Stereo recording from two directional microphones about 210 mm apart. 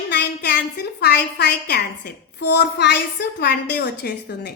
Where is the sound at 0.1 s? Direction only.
55° left (ahead or behind).